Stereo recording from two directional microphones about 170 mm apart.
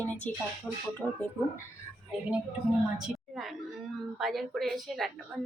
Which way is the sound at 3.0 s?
Centre (ahead or behind).